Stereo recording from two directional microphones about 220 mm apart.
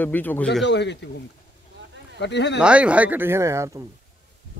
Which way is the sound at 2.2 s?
50° left (ahead or behind).